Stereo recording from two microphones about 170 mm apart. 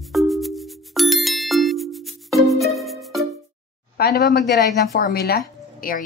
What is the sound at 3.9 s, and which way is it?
Speech, 70° left (ahead or behind).